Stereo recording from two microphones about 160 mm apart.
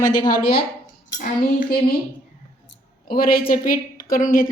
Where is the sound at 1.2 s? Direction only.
60° left (ahead or behind).